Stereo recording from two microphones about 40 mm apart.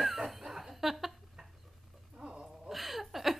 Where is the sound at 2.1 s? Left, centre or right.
Right.